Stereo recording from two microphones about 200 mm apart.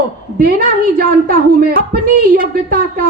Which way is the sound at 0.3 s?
45° right (ahead or behind).